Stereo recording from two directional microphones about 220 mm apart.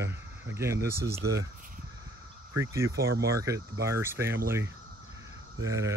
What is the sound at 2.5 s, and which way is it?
Speech, 15° right (ahead or behind).